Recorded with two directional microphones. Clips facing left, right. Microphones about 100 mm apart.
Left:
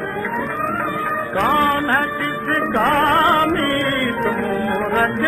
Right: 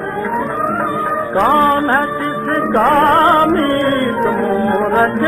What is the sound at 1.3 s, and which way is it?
Speech, 35° right (ahead or behind).